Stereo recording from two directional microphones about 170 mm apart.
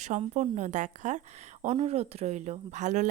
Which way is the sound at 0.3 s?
45° right (ahead or behind).